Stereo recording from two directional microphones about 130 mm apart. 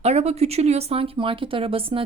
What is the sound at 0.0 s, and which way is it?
Speech, 55° right (ahead or behind).